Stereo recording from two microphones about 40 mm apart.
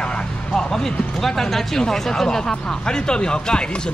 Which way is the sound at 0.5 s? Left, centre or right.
Centre.